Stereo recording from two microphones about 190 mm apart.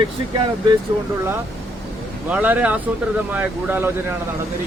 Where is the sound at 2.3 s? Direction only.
10° right (ahead or behind).